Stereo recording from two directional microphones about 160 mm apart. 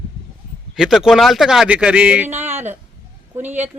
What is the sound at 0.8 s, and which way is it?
Speech, 5° right (ahead or behind).